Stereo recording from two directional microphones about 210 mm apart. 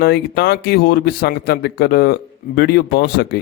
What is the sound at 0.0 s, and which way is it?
Speech, 50° left (ahead or behind).